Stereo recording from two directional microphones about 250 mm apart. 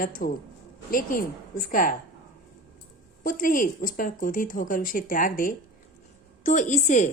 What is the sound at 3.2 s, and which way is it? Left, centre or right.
A woman's voice, left.